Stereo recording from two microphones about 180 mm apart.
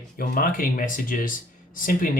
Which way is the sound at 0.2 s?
50° left (ahead or behind).